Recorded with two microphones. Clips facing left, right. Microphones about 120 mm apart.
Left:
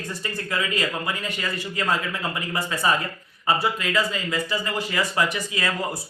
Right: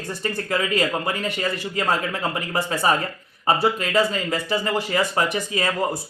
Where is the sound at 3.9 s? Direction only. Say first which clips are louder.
Right 4 dB; 35° right (ahead or behind).